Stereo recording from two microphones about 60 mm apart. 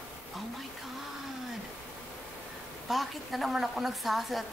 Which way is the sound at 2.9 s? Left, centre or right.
Centre.